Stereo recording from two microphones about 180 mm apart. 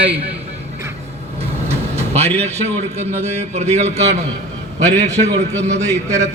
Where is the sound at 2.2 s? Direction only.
35° right (ahead or behind).